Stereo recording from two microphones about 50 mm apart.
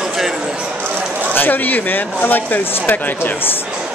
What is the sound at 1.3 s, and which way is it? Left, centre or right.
Speech, left.